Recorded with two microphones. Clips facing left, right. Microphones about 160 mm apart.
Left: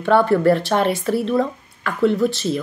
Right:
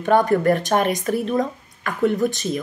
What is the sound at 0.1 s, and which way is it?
Speech, 15° right (ahead or behind).